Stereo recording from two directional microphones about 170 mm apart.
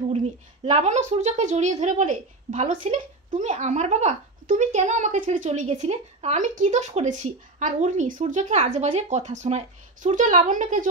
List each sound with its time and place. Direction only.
0.1 s speech: 40° right (ahead or behind)